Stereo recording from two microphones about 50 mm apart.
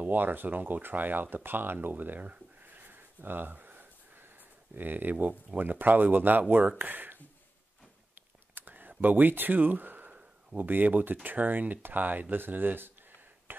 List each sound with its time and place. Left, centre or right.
0.0 s speech: right
8.1 s computer keyboard: right
10.6 s speech: right
13.5 s whispering: right